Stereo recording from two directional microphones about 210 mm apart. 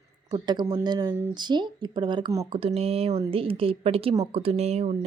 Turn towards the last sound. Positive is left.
turn(degrees=-30)  # may be behind; listen again after turning